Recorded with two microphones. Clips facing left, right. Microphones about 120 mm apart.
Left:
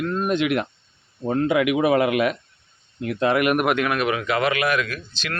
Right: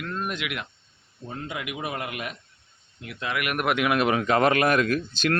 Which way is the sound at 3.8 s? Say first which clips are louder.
Even; 20° right (ahead or behind).